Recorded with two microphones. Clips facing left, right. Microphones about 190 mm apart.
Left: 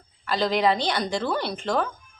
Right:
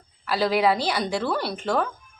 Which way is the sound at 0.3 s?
5° right (ahead or behind).